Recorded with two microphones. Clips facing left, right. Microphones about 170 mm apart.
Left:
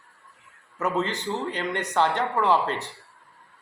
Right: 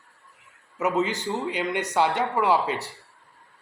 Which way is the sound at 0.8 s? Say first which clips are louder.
Right 2 dB; 15° right (ahead or behind).